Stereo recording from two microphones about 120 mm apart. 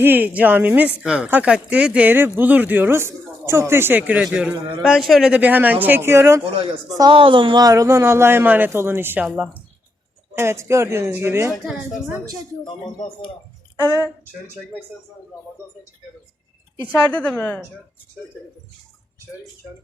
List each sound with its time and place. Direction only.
0.0 s a man's voice: 15° right (ahead or behind)
5.3 s speech: 15° right (ahead or behind)
6.9 s speech: 40° right (ahead or behind); by 9.2 s 20° right (ahead or behind)
9.2 s a man's voice: 5° right (ahead or behind)
10.3 s speech: 20° right (ahead or behind)
12.6 s speech: 40° left (ahead or behind)
14.4 s speech: 20° right (ahead or behind)
17.1 s a woman's voice: 10° left (ahead or behind)